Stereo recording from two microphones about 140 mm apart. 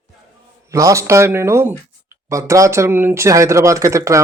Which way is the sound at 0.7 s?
20° right (ahead or behind).